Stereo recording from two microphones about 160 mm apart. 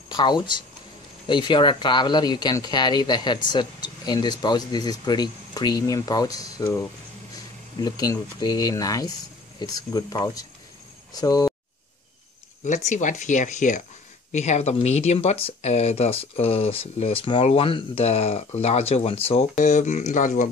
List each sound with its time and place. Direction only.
0.1 s speech: 30° left (ahead or behind)
12.6 s speech: 50° left (ahead or behind)